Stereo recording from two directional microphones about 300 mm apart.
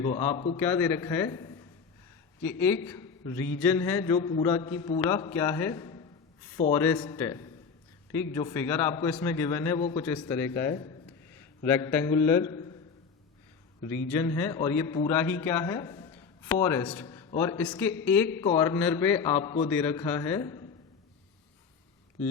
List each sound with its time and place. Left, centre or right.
0.0 s a man's voice: centre
0.5 s a man's voice: centre
14.1 s a man's voice: centre